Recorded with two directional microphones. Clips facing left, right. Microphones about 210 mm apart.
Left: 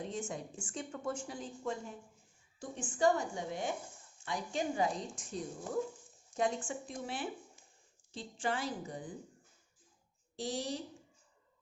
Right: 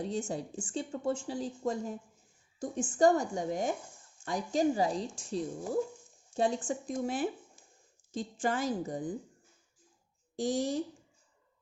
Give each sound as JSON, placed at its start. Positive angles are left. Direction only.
{"t": 0.0, "sound": "a woman's voice", "side_deg": -35}
{"t": 10.3, "sound": "a woman's voice", "side_deg": -50}